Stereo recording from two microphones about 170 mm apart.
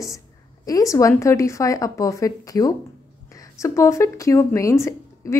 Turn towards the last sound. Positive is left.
turn(degrees=15)  # may be behind; listen again after turning